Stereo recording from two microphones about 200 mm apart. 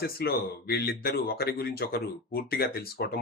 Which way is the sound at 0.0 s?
55° left (ahead or behind).